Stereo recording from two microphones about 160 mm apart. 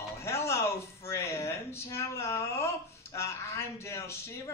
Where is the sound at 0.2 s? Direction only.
15° left (ahead or behind).